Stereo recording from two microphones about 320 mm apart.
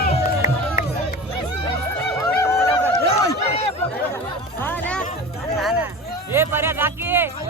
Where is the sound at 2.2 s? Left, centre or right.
Centre.